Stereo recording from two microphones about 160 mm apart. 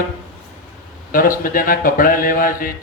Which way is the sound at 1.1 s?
60° left (ahead or behind).